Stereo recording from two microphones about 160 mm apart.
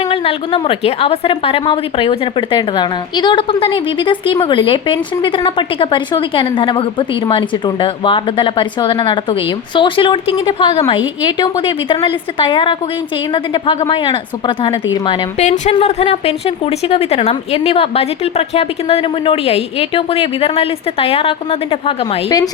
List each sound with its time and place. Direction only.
0.1 s a woman's voice: 35° left (ahead or behind)
15.4 s a woman's voice: 45° left (ahead or behind)